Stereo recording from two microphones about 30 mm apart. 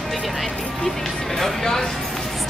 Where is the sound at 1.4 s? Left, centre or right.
Centre.